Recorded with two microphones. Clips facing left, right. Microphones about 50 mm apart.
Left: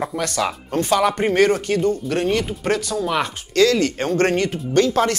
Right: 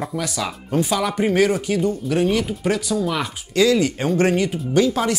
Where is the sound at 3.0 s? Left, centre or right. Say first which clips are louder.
Left 1 dB; centre.